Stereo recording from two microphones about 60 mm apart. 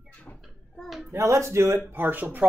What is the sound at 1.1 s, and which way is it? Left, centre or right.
Speech, right.